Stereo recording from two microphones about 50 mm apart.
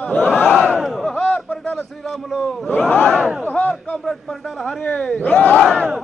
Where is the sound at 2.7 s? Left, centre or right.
Left.